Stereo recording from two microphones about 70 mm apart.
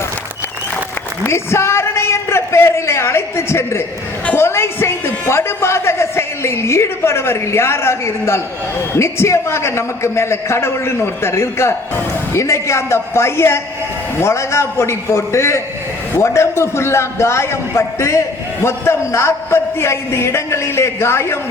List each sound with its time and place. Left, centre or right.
1.3 s a man's voice: left